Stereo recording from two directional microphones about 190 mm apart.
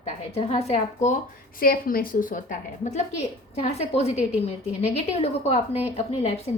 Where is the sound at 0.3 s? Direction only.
35° left (ahead or behind).